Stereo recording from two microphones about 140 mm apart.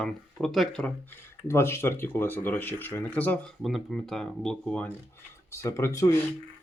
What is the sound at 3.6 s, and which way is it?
Speech, centre (ahead or behind).